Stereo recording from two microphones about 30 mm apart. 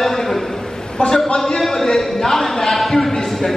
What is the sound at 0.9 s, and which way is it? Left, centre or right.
Speech, left.